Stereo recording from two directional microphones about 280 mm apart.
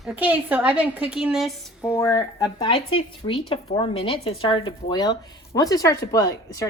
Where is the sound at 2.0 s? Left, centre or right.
Centre.